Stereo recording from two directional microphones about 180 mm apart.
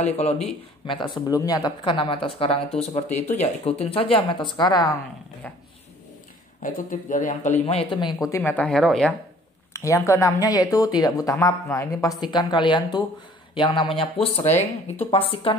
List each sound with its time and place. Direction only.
0.0 s speech: 35° left (ahead or behind)
6.6 s speech: 50° left (ahead or behind)
7.9 s speech: 25° left (ahead or behind)
8.4 s speech: 10° left (ahead or behind)
9.7 s speech: 15° left (ahead or behind)
15.0 s speech: 30° left (ahead or behind)